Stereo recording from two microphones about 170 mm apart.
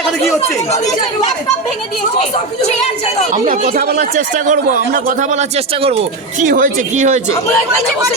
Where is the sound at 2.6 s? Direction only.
40° left (ahead or behind).